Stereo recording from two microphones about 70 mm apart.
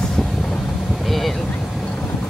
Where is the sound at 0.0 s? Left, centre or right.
Centre.